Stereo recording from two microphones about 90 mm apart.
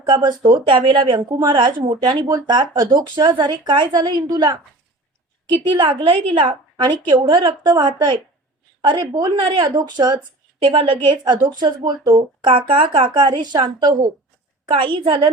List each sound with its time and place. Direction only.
0.0 s a woman's voice: 55° right (ahead or behind)
2.2 s speech: 50° right (ahead or behind)
5.5 s a woman's voice: 65° right (ahead or behind)
10.6 s a woman's voice: 70° right (ahead or behind); by 14.1 s 50° right (ahead or behind)
14.7 s a woman's voice: 70° right (ahead or behind)